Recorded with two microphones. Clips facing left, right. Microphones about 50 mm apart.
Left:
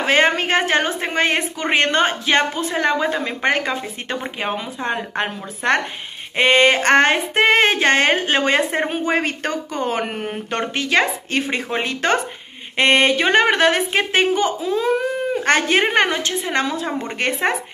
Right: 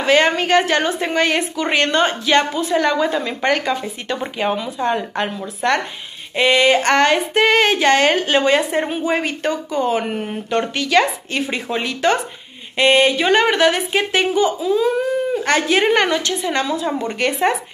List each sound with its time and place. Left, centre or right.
0.0 s speech: left
6.3 s speech: left